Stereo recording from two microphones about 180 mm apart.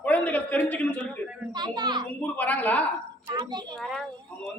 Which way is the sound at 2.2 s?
10° left (ahead or behind).